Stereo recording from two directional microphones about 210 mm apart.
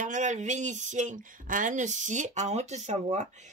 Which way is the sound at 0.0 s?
35° right (ahead or behind).